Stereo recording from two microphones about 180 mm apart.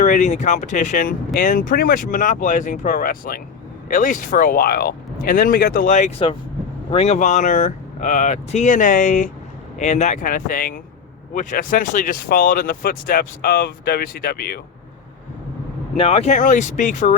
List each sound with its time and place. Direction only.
0.0 s speech: 45° left (ahead or behind)
16.0 s speech: 30° left (ahead or behind)